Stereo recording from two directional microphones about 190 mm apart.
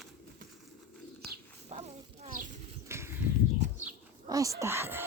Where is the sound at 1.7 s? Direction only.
35° right (ahead or behind).